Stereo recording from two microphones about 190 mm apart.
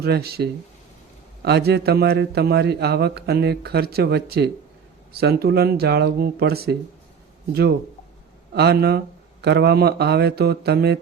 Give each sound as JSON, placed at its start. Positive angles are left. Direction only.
{"t": 0.0, "sound": "a man's voice", "side_deg": -55}
{"t": 8.5, "sound": "a man's voice", "side_deg": -55}